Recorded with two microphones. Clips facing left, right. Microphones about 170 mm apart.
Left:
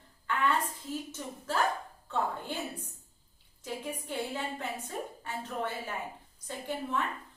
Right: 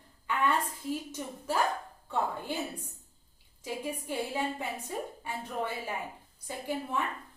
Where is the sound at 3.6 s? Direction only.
10° right (ahead or behind).